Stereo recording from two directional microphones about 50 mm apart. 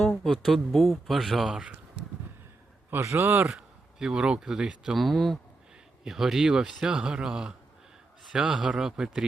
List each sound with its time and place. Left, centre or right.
0.0 s a sound: centre
0.3 s speech: centre
3.0 s speech: right
3.9 s speech: centre
4.9 s speech: centre
6.1 s speech: centre